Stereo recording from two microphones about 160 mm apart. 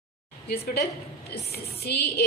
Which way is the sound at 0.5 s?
80° left.